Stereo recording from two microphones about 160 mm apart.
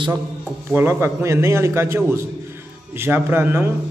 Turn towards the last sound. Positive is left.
turn(degrees=-15)  # may be behind; listen again after turning